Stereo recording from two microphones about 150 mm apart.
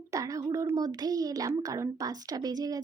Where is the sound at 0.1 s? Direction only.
20° right (ahead or behind).